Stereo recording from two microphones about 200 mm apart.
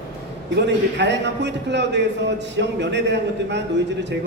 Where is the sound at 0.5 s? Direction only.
60° right (ahead or behind).